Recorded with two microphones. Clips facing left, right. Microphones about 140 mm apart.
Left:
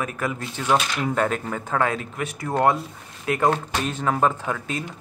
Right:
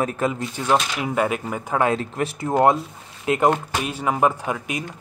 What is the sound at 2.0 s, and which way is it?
Speech, 30° right (ahead or behind).